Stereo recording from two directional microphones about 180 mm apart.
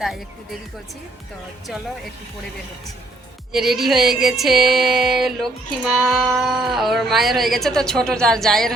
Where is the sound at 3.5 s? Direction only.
Centre (ahead or behind).